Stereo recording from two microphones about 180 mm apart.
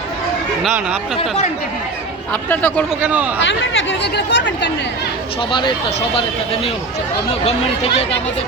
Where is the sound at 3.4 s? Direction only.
90° left.